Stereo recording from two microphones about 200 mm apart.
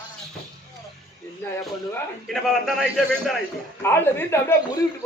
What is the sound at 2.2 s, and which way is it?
A man's voice, centre (ahead or behind).